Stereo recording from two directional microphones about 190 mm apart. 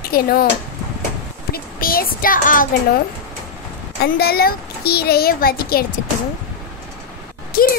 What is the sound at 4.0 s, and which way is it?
A child's voice, 55° left (ahead or behind).